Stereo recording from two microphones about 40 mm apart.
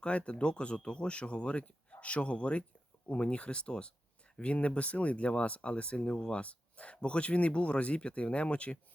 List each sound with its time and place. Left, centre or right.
0.0 s speech: left